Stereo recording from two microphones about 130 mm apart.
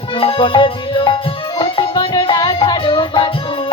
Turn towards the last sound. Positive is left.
turn(degrees=40)  # may be behind; listen again after turning